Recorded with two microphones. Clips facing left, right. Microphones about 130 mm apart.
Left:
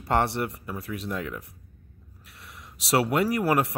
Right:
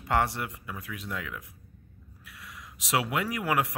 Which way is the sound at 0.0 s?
30° left (ahead or behind).